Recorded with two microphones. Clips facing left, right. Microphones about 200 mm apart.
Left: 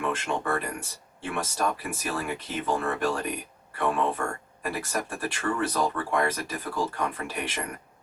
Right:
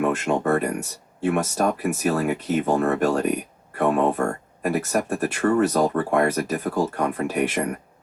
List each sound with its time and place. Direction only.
0.0 s speech: 45° right (ahead or behind)